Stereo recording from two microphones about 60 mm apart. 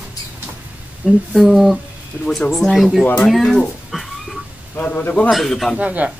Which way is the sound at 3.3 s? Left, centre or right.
Centre.